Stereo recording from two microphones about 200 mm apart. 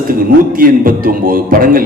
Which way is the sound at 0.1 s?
45° right (ahead or behind).